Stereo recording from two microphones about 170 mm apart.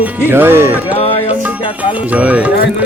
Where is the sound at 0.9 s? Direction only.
35° left (ahead or behind).